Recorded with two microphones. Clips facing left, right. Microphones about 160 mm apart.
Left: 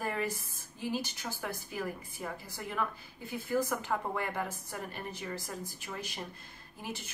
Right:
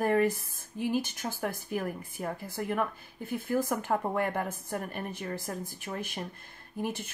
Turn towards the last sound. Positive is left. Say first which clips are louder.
# right 8 dB
turn(degrees=-50)  # may be behind; listen again after turning